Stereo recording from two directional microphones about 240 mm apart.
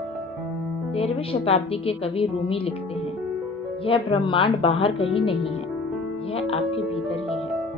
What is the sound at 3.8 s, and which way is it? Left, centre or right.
A woman's voice, left.